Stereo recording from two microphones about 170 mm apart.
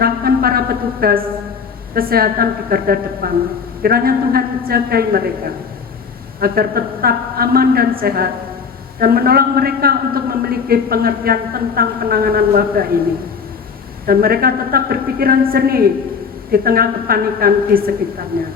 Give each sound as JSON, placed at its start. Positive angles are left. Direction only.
{"t": 0.0, "sound": "a woman's voice", "side_deg": -65}
{"t": 6.4, "sound": "a woman's voice", "side_deg": -60}
{"t": 14.1, "sound": "a woman's voice", "side_deg": -60}